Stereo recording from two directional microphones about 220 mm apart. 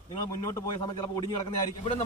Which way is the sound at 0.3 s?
15° left (ahead or behind).